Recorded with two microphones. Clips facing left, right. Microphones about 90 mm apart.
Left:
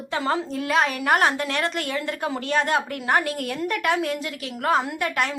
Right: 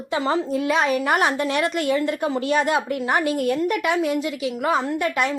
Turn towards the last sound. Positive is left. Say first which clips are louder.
# right 3 dB
turn(degrees=0)  # may be behind; listen again after turning